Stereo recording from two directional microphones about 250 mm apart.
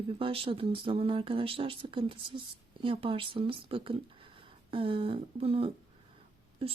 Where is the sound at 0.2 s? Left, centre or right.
Right.